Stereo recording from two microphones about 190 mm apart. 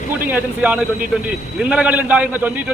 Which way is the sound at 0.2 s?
10° right (ahead or behind).